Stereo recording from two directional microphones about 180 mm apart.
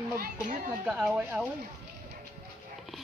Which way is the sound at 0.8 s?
Centre (ahead or behind).